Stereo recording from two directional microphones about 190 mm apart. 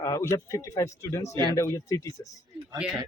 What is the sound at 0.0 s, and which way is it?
Speech, 15° left (ahead or behind).